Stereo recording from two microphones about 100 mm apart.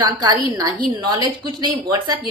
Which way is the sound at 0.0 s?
45° right (ahead or behind).